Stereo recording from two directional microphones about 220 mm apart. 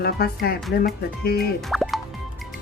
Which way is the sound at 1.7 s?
Centre (ahead or behind).